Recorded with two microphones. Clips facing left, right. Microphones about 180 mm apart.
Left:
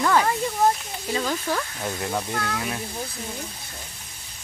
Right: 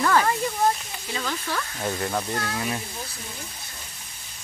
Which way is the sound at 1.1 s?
40° left (ahead or behind).